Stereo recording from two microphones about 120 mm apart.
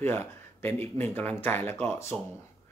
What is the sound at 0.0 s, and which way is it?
Speech, 20° left (ahead or behind).